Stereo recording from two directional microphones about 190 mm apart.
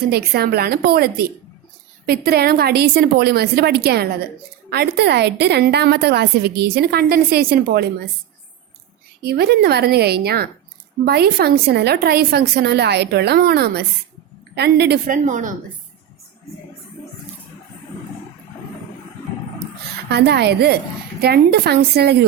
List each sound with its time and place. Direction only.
0.1 s a woman's voice: 55° right (ahead or behind)
9.2 s a woman's voice: 55° right (ahead or behind); by 15.5 s 40° right (ahead or behind)
20.1 s a woman's voice: 60° right (ahead or behind)